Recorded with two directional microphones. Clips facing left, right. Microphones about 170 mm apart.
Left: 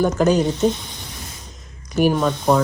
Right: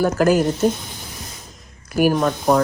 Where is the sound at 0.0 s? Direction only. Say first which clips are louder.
Right 1 dB; centre (ahead or behind).